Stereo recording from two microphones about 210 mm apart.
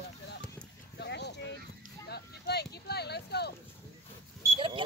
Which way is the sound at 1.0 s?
55° left (ahead or behind).